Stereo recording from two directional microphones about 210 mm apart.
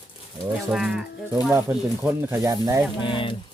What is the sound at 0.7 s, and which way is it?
Speech, 5° right (ahead or behind).